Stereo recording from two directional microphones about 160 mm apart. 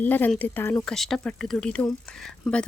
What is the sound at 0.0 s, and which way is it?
Speech, 10° left (ahead or behind).